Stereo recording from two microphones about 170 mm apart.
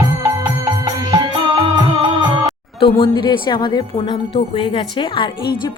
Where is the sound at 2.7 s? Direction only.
30° left (ahead or behind).